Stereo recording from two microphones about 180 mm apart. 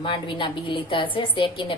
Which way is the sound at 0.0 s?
25° left (ahead or behind).